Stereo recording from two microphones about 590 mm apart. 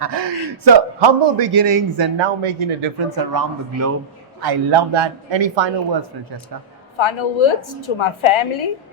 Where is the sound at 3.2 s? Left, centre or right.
Right.